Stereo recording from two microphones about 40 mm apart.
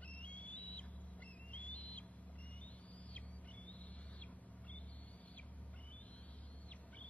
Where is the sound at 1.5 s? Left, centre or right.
Left.